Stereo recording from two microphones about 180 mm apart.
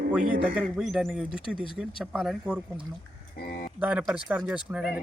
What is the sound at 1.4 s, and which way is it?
Speech, 30° left (ahead or behind).